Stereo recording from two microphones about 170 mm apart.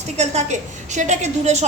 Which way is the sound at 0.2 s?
45° right (ahead or behind).